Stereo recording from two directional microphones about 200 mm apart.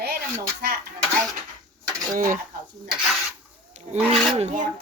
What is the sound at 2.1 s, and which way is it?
Speech, 45° right (ahead or behind).